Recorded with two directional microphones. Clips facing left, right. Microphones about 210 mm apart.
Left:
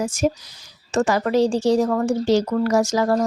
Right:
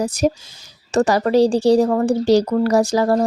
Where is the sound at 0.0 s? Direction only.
35° right (ahead or behind).